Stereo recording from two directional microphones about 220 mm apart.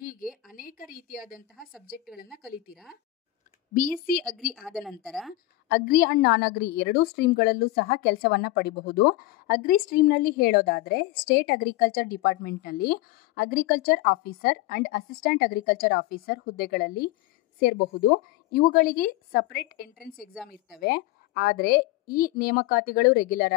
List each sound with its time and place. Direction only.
0.0 s a sound: 40° left (ahead or behind)
2.4 s a woman's voice: centre (ahead or behind)
4.5 s a woman's voice: centre (ahead or behind)
5.7 s a woman's voice: 45° left (ahead or behind)